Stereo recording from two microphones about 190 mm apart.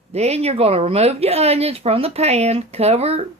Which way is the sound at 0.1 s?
35° right (ahead or behind).